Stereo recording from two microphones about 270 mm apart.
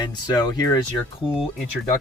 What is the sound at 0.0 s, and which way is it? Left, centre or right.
Speech, centre.